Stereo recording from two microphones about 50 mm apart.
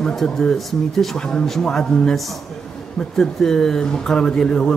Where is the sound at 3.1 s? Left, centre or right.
Centre.